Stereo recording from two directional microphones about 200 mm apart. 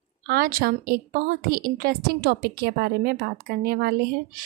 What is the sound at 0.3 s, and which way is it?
A woman's voice, 45° right (ahead or behind).